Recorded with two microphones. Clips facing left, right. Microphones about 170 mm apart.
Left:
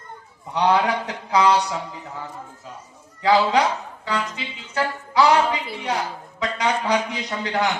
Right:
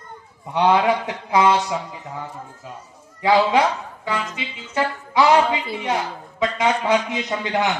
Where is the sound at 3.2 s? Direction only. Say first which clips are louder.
Right 1 dB; 25° right (ahead or behind).